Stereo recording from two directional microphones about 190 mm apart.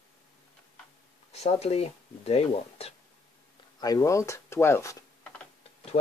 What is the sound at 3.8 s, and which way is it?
Speech, 20° left (ahead or behind).